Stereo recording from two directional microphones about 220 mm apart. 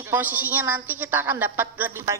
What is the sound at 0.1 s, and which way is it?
A woman's voice, 10° right (ahead or behind).